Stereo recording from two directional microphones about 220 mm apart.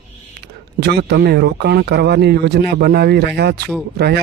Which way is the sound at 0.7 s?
50° right (ahead or behind).